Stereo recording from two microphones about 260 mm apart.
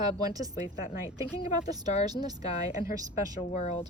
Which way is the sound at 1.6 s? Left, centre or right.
Centre.